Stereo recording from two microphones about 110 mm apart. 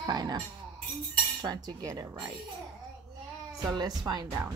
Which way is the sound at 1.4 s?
40° right (ahead or behind).